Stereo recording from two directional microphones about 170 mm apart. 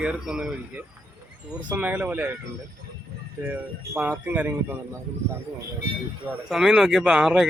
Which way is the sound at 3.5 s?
10° right (ahead or behind).